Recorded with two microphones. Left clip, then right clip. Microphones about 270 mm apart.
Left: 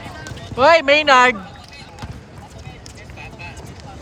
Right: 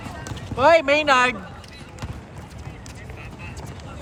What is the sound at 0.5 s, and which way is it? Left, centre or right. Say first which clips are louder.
Speech: left 4 dB; left.